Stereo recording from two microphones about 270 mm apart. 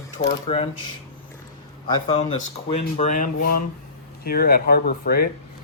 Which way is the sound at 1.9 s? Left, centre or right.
Centre.